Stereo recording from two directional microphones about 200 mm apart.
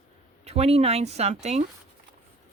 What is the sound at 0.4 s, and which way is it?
Speech, 30° right (ahead or behind).